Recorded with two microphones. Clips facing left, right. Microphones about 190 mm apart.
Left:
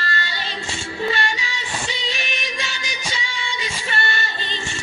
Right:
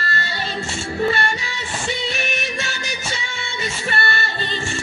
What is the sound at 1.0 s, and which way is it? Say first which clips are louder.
Music: right 1 dB; 50° right (ahead or behind).